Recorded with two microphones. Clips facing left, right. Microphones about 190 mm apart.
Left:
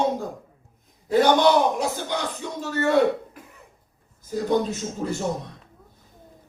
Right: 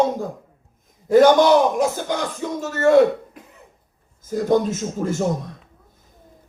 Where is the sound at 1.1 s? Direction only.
45° right (ahead or behind).